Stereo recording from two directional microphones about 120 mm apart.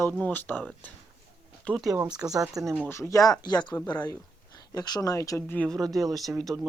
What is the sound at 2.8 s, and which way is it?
Speech, 20° left (ahead or behind).